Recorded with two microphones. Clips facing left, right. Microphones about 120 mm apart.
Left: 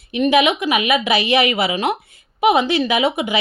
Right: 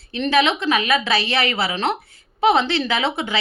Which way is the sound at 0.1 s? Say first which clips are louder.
Left 3 dB; 15° left (ahead or behind).